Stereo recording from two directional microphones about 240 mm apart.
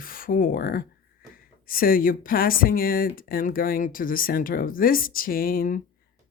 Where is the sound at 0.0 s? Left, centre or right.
Left.